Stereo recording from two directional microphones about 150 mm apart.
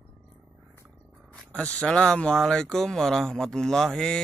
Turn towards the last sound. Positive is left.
turn(degrees=5)  # may be behind; listen again after turning